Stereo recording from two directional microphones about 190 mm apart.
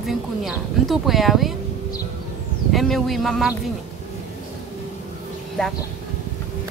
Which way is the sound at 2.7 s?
Centre (ahead or behind).